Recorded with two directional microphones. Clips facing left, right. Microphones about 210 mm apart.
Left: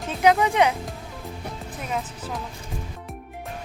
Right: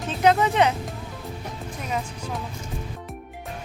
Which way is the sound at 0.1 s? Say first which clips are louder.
Even; 10° left (ahead or behind).